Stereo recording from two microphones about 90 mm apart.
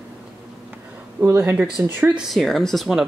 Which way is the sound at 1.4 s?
20° right (ahead or behind).